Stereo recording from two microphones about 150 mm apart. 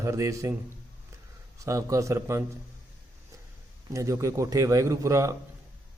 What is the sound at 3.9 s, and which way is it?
A man's voice, 20° right (ahead or behind).